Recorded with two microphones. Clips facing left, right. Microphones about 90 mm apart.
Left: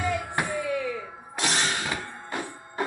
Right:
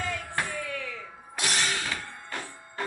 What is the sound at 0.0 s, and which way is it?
Music, 15° left (ahead or behind).